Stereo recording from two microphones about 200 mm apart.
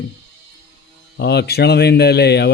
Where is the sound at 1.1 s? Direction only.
55° left (ahead or behind).